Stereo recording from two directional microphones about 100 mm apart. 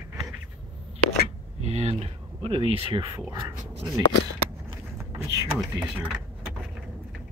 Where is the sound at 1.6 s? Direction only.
90° right; by 3.2 s 50° right (ahead or behind).